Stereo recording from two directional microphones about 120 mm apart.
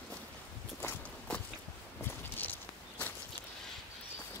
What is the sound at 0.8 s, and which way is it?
Walk, 15° left (ahead or behind).